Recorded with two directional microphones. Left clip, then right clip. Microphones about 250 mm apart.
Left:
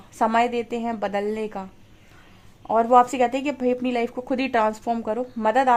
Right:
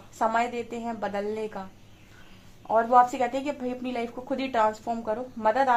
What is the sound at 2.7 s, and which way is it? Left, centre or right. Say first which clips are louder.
A woman's voice: left 3 dB; left.